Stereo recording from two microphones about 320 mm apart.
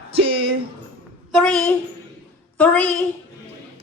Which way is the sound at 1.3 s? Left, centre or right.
Centre.